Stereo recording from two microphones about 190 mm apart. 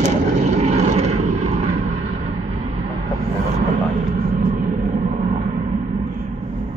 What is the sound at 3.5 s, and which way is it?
Vehicle, 45° right (ahead or behind).